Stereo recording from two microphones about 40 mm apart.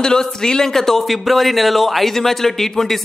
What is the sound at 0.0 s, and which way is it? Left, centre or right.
Speech, centre.